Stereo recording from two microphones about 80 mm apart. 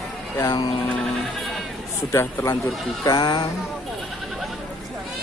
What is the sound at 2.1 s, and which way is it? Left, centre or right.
Speech, left.